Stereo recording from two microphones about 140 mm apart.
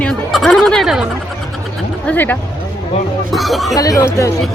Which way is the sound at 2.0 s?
15° left (ahead or behind).